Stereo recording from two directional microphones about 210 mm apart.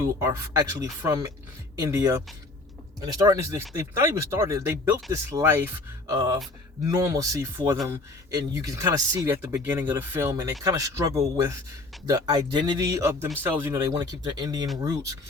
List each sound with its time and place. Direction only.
0.0 s speech: 15° right (ahead or behind)